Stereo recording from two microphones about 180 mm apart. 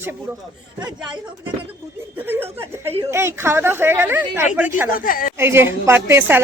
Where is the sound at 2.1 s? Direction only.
10° right (ahead or behind).